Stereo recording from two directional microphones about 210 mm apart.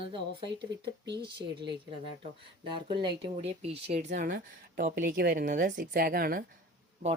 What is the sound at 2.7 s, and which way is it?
Speech, 20° right (ahead or behind).